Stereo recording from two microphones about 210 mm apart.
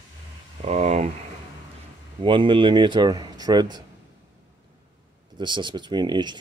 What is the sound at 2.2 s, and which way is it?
Speech, 25° right (ahead or behind).